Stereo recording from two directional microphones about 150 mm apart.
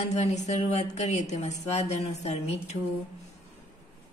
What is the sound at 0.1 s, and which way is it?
A woman's voice, 50° left (ahead or behind).